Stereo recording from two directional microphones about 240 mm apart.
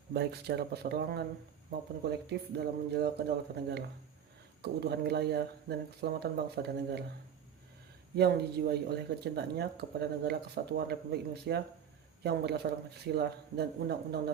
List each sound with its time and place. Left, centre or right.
0.1 s speech: right
2.6 s speech: right
8.1 s speech: right